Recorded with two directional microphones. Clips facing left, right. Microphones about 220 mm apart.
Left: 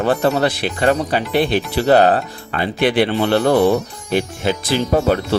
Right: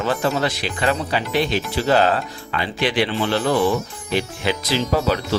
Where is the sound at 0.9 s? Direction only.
45° left (ahead or behind).